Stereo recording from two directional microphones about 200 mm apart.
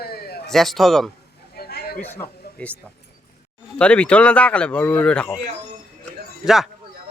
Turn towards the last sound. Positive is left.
turn(degrees=0)  # may be behind; listen again after turning